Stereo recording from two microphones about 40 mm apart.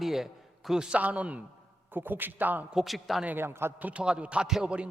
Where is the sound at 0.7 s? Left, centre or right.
Centre.